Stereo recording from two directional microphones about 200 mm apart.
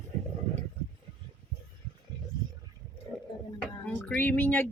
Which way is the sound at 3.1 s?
Centre (ahead or behind).